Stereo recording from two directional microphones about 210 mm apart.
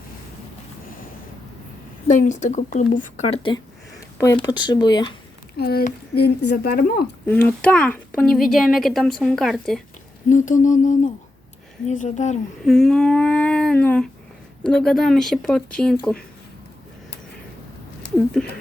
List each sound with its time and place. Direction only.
2.0 s speech: 35° left (ahead or behind); by 5.1 s 20° left (ahead or behind)
5.5 s speech: 45° left (ahead or behind)
7.3 s speech: 5° left (ahead or behind)
10.2 s speech: 35° left (ahead or behind)
12.6 s a sound: centre (ahead or behind)
14.6 s speech: 5° left (ahead or behind)